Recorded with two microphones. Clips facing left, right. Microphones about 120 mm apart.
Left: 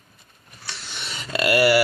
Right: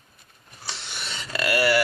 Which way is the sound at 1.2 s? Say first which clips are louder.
Left 4 dB; 20° left (ahead or behind).